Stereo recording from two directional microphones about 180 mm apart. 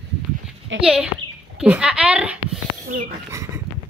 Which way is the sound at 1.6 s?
5° right (ahead or behind).